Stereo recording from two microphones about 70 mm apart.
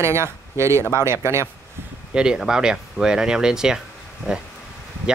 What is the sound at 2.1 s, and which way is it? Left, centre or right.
Speech, centre.